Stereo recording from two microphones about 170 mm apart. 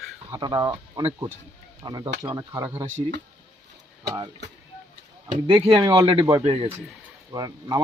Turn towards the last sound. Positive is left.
turn(degrees=-25)  # may be behind; listen again after turning